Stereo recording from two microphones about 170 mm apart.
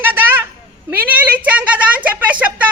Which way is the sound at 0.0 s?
10° right (ahead or behind).